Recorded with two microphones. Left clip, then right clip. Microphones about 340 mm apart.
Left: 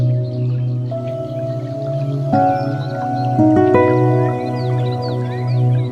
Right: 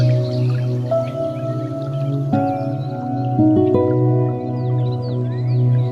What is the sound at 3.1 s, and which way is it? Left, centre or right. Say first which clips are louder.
Music: left 2 dB; left.